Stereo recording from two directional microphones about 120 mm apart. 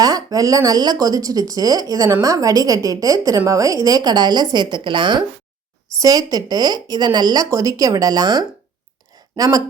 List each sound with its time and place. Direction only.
0.0 s a woman's voice: 30° right (ahead or behind)
6.0 s speech: 30° right (ahead or behind)